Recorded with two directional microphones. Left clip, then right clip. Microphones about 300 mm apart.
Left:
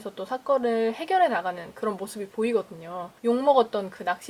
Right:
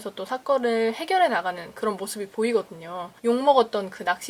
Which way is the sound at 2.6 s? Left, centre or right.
Centre.